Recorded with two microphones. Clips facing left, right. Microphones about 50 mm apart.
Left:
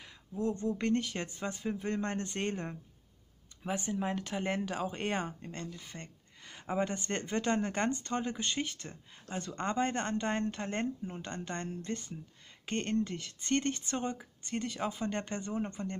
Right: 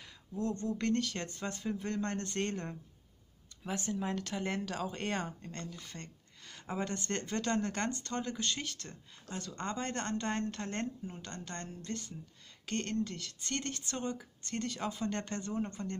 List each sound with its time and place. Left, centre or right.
0.0 s speech: centre